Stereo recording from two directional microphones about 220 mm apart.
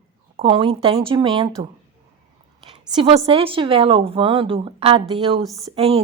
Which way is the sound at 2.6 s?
25° right (ahead or behind).